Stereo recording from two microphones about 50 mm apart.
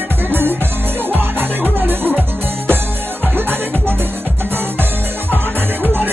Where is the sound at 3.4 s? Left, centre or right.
Right.